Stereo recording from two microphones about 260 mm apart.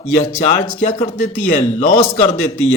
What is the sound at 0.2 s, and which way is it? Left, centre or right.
A man's voice, left.